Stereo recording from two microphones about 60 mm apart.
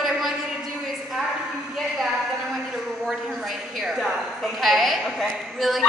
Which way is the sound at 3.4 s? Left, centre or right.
Centre.